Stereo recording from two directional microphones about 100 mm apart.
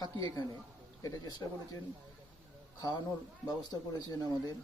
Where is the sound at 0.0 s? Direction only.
40° left (ahead or behind).